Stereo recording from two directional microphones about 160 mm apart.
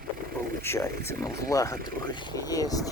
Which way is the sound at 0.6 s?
15° left (ahead or behind).